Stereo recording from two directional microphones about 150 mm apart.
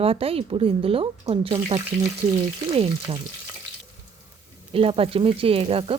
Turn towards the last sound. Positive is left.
turn(degrees=-40)  # may be behind; listen again after turning